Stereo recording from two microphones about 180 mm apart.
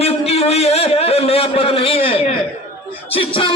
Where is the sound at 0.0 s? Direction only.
35° left (ahead or behind).